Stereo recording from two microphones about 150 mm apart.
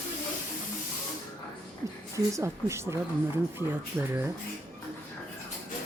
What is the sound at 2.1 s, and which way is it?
Speech, 20° right (ahead or behind).